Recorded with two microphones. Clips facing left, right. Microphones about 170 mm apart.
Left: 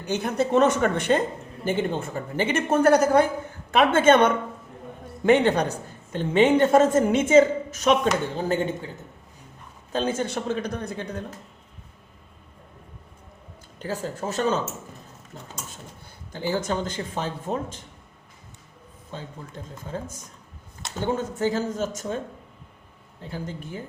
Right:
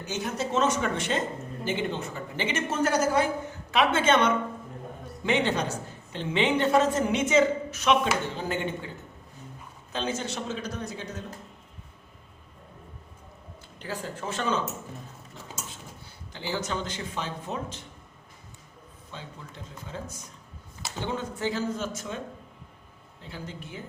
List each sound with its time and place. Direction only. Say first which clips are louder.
0.0 s a man's voice: left 6 dB; 55° left (ahead or behind); by 8.6 s 40° left (ahead or behind)
9.9 s a man's voice: left 6 dB; 50° left (ahead or behind)
13.7 s speech: left 5 dB; 40° left (ahead or behind)
16.3 s a woman's voice: left 5 dB; 50° left (ahead or behind)
19.1 s a woman's voice: left 5 dB; 45° left (ahead or behind)
21.0 s a woman's voice: left 6 dB; 45° left (ahead or behind)
23.2 s a woman's voice: left 6 dB; 45° left (ahead or behind)